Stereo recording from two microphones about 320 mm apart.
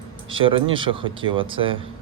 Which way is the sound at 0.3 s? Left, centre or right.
Centre.